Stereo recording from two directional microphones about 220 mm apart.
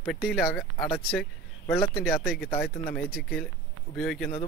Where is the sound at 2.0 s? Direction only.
5° left (ahead or behind).